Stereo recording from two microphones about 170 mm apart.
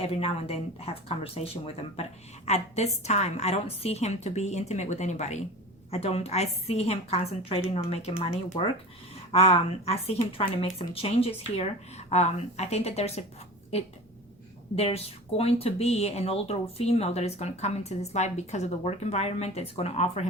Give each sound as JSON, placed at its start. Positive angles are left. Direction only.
{"t": 0.0, "sound": "speech", "side_deg": 35}